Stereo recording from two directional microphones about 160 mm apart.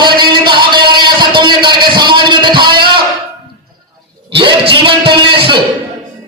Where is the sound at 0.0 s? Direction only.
30° right (ahead or behind).